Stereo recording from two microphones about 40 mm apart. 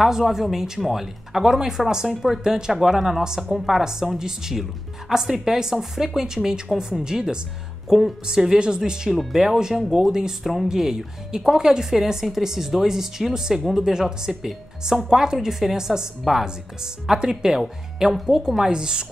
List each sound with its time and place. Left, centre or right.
0.0 s speech: centre
9.1 s speech: centre
10.4 s speech: centre
18.7 s speech: right